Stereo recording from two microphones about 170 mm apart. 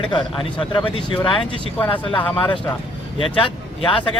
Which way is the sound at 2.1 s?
10° left (ahead or behind).